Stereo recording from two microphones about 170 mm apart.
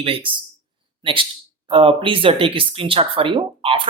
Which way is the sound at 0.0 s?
30° right (ahead or behind).